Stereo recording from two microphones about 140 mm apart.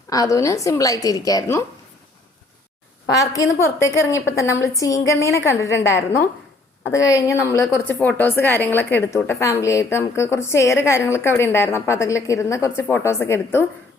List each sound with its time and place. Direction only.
0.1 s a woman's voice: 25° left (ahead or behind)
3.1 s a woman's voice: 25° left (ahead or behind)